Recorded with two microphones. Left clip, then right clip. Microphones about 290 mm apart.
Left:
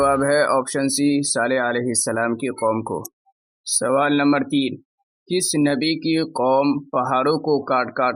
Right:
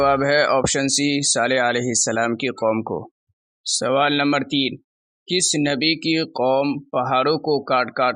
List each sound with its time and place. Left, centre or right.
0.0 s speech: left